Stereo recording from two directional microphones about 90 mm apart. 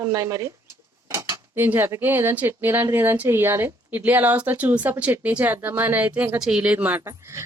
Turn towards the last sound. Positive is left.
turn(degrees=-35)  # may be behind; listen again after turning